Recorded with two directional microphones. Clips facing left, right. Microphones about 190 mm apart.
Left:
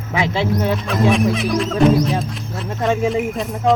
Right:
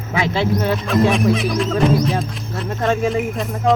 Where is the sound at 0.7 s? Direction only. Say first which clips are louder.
Right 1 dB; centre (ahead or behind).